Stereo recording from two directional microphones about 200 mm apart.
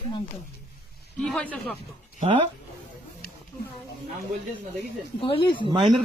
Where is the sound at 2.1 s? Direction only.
30° right (ahead or behind).